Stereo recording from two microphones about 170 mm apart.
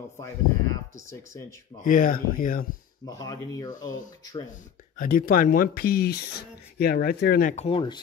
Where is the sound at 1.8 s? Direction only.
50° left (ahead or behind).